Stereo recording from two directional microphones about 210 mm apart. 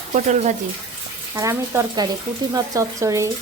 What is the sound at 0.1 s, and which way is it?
Speech, 35° right (ahead or behind).